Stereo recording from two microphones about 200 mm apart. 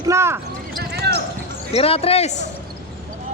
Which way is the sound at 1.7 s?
30° left (ahead or behind).